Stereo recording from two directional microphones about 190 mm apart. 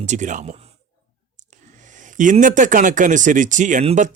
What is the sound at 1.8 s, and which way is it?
Speech, 40° right (ahead or behind).